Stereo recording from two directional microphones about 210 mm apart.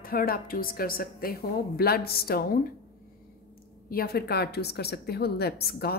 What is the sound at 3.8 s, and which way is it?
A woman's voice, 45° left (ahead or behind).